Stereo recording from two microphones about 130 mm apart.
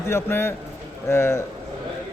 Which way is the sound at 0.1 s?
20° left (ahead or behind).